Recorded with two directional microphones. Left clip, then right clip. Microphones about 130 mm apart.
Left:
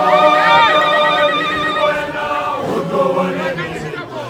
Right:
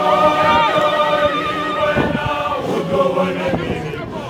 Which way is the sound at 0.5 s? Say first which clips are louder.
Left 4 dB; 40° left (ahead or behind).